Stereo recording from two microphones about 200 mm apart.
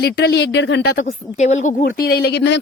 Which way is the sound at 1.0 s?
35° left (ahead or behind).